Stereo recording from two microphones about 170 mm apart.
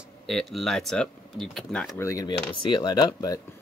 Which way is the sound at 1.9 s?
20° left (ahead or behind).